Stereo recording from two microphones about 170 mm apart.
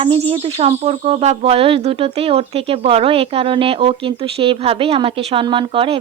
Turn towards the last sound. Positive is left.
turn(degrees=-30)  # may be behind; listen again after turning